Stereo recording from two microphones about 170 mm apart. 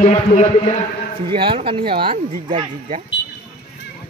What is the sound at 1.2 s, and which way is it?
Speech, 30° right (ahead or behind).